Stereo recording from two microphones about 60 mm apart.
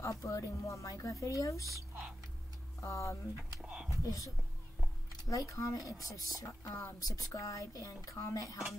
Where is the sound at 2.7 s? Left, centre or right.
Left.